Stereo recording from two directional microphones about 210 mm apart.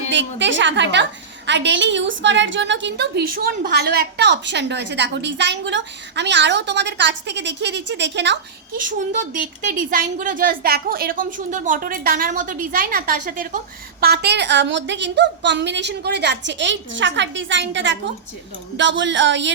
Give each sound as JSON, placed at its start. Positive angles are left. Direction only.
{"t": 0.1, "sound": "a woman's voice", "side_deg": -60}
{"t": 9.1, "sound": "a woman's voice", "side_deg": -40}
{"t": 14.0, "sound": "a woman's voice", "side_deg": -50}